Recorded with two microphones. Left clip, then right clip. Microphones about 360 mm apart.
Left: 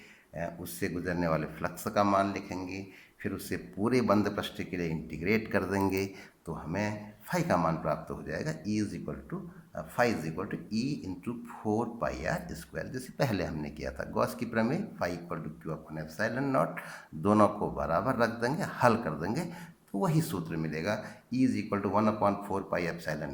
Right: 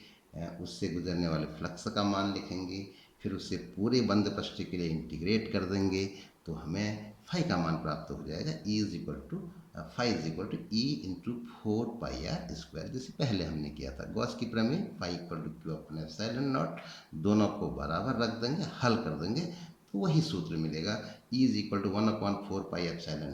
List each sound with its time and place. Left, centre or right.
0.3 s speech: centre
12.0 s speech: centre